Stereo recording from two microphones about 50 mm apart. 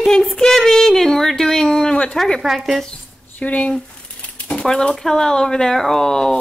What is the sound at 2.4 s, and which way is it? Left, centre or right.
Speech, centre.